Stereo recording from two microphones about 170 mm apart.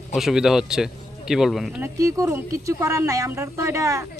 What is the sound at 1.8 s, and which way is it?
Speech, 20° right (ahead or behind).